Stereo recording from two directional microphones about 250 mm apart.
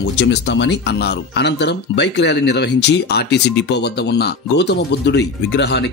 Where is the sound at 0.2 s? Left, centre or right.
Left.